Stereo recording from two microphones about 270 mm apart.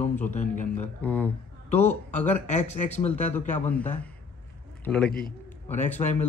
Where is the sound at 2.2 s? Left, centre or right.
Left.